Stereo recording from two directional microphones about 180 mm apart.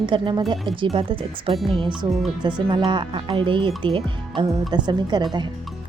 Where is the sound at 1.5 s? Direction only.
Centre (ahead or behind).